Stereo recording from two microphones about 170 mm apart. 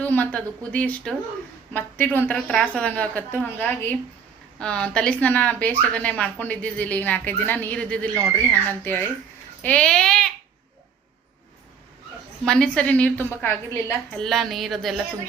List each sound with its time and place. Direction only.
0.0 s a woman's voice: 10° left (ahead or behind)
8.1 s speech: 15° right (ahead or behind)
8.8 s a woman's voice: 10° left (ahead or behind)
12.5 s a woman's voice: 5° left (ahead or behind)